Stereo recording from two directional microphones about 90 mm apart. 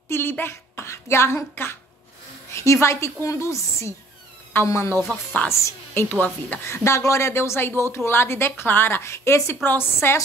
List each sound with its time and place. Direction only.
0.1 s a woman's voice: 25° left (ahead or behind)
6.1 s speech: 20° left (ahead or behind)